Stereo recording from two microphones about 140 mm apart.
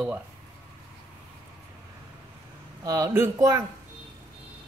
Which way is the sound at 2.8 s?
25° right (ahead or behind).